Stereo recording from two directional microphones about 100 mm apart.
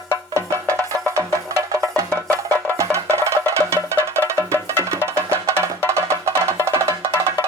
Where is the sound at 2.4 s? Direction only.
30° right (ahead or behind).